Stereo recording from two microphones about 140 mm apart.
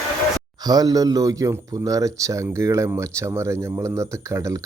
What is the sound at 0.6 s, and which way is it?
Speech, 30° right (ahead or behind).